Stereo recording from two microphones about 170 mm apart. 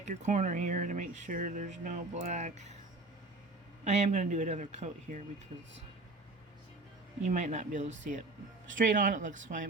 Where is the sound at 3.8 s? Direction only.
40° right (ahead or behind).